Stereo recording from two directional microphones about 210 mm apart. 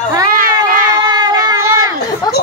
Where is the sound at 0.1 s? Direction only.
15° right (ahead or behind).